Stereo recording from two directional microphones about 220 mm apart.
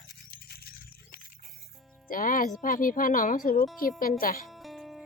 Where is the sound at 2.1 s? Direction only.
40° left (ahead or behind).